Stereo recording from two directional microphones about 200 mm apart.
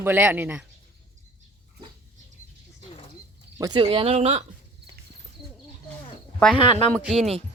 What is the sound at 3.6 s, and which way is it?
Speech, 20° right (ahead or behind).